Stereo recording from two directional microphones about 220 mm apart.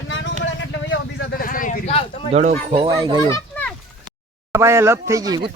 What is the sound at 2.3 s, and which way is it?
Speech, 30° right (ahead or behind).